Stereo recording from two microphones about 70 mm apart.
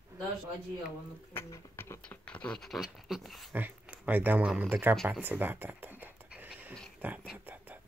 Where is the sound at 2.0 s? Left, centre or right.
Centre.